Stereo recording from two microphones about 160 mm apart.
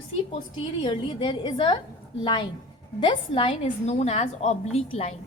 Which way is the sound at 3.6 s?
45° left (ahead or behind).